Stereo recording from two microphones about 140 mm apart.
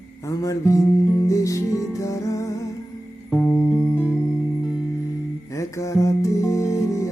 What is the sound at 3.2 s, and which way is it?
Music, 5° left (ahead or behind).